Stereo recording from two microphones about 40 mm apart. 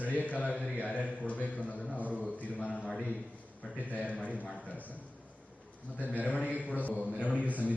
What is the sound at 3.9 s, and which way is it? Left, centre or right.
Speech, left.